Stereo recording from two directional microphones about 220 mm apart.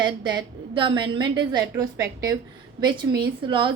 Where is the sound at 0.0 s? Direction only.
20° right (ahead or behind).